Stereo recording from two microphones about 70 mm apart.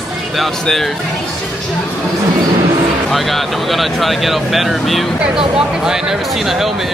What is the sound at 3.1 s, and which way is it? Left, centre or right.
Speech, centre.